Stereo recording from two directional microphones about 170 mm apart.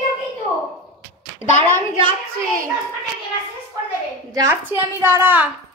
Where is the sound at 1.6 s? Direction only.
30° right (ahead or behind).